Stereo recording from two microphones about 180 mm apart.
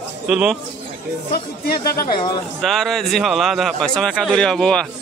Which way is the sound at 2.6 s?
Centre (ahead or behind).